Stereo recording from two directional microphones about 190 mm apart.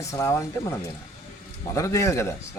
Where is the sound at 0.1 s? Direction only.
15° left (ahead or behind).